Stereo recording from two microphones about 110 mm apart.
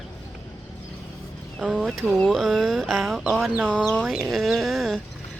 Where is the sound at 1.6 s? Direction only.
Centre (ahead or behind).